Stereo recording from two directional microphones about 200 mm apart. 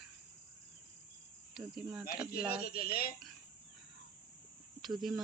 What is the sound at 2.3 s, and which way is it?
Speech, 50° left (ahead or behind).